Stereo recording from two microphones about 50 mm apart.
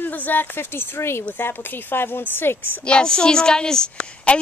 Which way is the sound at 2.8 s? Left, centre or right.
Centre.